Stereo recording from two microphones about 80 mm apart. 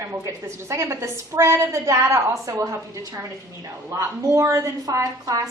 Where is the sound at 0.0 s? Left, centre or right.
Right.